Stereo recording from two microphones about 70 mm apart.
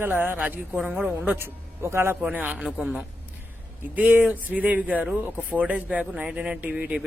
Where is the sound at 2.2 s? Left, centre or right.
Right.